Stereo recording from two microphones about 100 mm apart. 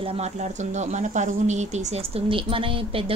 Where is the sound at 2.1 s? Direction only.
60° right (ahead or behind).